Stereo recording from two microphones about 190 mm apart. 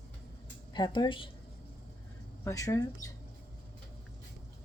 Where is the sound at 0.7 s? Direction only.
25° left (ahead or behind).